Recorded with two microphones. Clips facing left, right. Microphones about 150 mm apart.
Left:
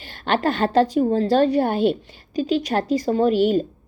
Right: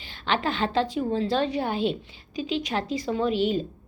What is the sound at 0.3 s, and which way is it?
A woman's voice, 45° left (ahead or behind).